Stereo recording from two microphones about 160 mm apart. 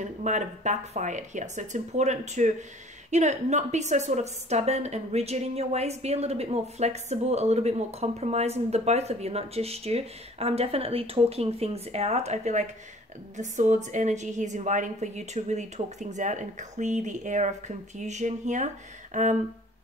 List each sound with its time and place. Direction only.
0.0 s a woman's voice: 50° right (ahead or behind)